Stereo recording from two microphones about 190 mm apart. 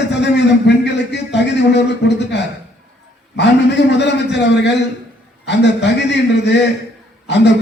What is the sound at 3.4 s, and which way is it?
A man's voice, 65° left (ahead or behind).